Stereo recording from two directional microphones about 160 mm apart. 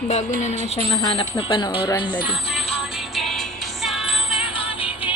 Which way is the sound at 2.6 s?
40° left (ahead or behind).